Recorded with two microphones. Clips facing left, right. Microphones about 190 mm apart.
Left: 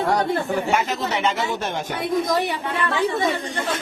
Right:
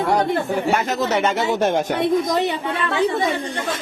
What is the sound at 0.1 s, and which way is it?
Speech, 15° right (ahead or behind).